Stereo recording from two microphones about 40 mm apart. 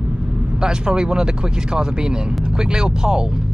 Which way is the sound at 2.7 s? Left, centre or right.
Centre.